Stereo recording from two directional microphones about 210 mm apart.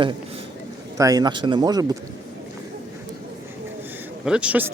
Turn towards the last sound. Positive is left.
turn(degrees=-5)  # may be behind; listen again after turning